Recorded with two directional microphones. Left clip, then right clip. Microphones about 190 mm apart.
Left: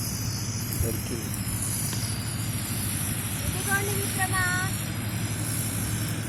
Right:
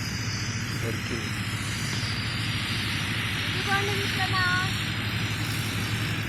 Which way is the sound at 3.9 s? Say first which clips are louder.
Right 3 dB; 65° left (ahead or behind).